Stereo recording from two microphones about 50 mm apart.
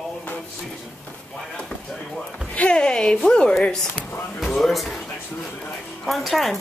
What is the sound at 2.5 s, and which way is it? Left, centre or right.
A man's voice, left.